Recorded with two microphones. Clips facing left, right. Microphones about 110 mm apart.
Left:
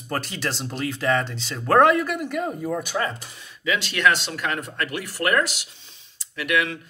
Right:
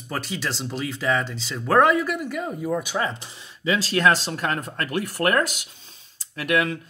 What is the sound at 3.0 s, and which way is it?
Speech, 20° right (ahead or behind).